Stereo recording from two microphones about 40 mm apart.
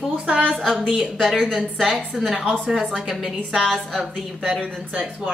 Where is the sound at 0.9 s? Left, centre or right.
Centre.